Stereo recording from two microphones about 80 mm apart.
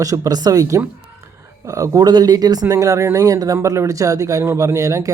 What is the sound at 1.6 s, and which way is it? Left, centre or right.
Speech, right.